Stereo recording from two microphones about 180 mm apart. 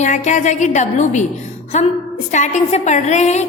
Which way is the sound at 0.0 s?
40° left (ahead or behind).